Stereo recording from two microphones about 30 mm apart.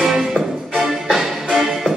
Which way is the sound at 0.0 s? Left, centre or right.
Centre.